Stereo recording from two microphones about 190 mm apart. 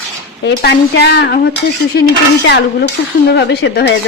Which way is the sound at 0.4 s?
60° left (ahead or behind).